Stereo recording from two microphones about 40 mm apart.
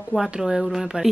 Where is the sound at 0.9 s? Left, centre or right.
Right.